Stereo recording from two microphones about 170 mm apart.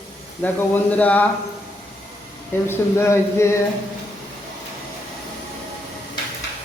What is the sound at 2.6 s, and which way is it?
Speech, 15° left (ahead or behind).